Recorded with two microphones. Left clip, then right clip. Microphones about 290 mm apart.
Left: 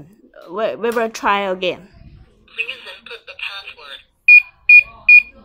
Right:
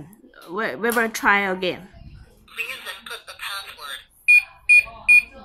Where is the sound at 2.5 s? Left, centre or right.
Centre.